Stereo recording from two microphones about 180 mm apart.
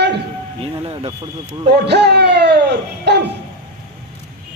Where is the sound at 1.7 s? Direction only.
70° right (ahead or behind).